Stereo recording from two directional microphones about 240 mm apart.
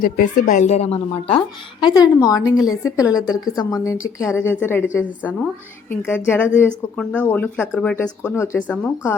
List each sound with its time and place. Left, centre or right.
0.0 s a woman's voice: left; by 3.2 s centre
3.2 s a woman's voice: centre
3.4 s speech: centre